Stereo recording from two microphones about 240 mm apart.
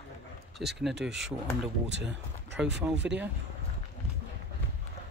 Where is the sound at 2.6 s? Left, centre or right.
Centre.